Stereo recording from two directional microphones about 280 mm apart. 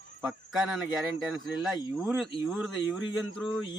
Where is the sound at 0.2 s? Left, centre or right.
Centre.